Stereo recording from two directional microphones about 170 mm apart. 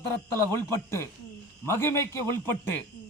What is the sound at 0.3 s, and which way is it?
A man's voice, 15° left (ahead or behind).